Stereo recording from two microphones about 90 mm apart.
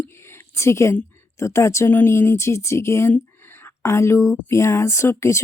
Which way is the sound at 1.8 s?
25° left (ahead or behind).